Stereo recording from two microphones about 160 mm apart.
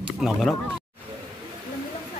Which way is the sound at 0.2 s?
Centre (ahead or behind).